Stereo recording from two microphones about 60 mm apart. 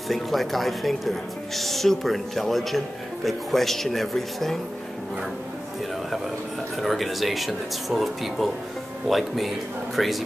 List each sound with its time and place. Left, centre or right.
0.1 s a woman's voice: centre
6.8 s a woman's voice: centre